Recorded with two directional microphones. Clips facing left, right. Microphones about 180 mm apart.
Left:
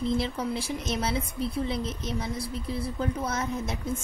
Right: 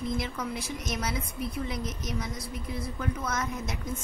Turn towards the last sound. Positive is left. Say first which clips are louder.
# left 3 dB
turn(degrees=30)  # may be behind; listen again after turning